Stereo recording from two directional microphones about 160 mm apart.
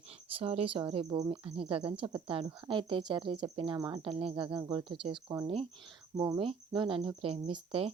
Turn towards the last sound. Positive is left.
turn(degrees=-35)  # may be behind; listen again after turning